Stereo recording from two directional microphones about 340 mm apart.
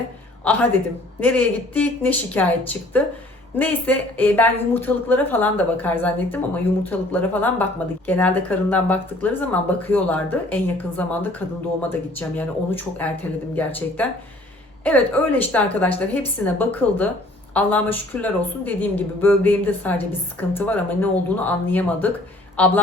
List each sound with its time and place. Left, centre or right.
1.2 s speech: centre